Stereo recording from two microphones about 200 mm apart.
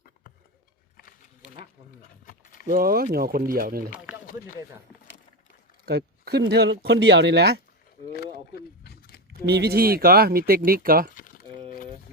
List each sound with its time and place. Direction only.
2.6 s speech: 45° right (ahead or behind)
5.8 s speech: 55° right (ahead or behind)
8.2 s a sound: 50° left (ahead or behind)
9.5 s speech: 55° right (ahead or behind)
11.1 s crumpling: 40° left (ahead or behind)